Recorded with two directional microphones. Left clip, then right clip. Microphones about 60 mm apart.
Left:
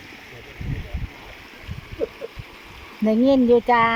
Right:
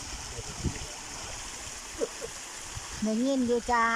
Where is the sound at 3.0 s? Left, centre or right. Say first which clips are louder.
Left 12 dB; left.